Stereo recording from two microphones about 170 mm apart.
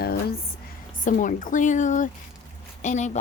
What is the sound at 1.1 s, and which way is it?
A woman's voice, 50° left (ahead or behind).